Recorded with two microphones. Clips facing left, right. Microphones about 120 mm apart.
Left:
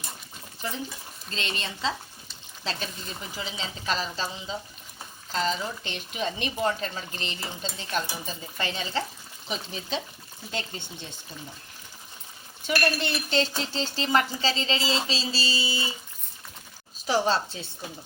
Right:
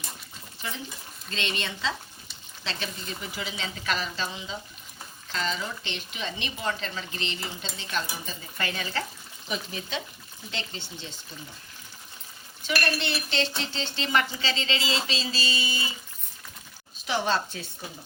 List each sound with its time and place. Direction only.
1.3 s a woman's voice: 40° left (ahead or behind)
8.5 s speech: 25° left (ahead or behind)
10.5 s speech: 45° left (ahead or behind)
12.6 s a woman's voice: 40° left (ahead or behind)
17.1 s a woman's voice: 35° left (ahead or behind)